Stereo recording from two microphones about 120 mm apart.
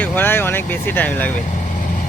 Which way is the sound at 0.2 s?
15° left (ahead or behind).